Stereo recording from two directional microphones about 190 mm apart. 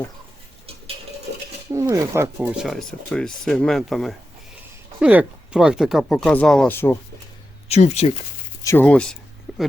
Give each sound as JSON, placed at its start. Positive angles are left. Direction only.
{"t": 1.7, "sound": "speech", "side_deg": -15}
{"t": 2.4, "sound": "speech", "side_deg": -5}
{"t": 7.7, "sound": "speech", "side_deg": 35}
{"t": 8.6, "sound": "speech", "side_deg": 10}
{"t": 9.5, "sound": "a sound", "side_deg": -5}